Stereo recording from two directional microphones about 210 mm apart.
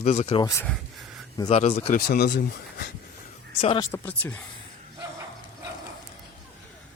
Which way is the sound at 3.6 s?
25° left (ahead or behind).